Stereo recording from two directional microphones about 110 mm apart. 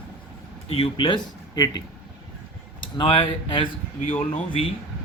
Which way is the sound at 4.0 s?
90° left.